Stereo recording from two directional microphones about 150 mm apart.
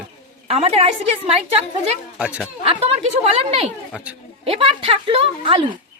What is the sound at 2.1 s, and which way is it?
Speech, 5° right (ahead or behind).